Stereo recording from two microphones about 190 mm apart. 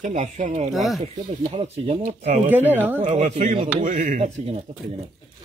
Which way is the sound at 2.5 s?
10° right (ahead or behind).